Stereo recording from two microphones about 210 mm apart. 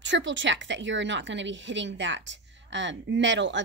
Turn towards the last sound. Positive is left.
turn(degrees=-60)  # may be behind; listen again after turning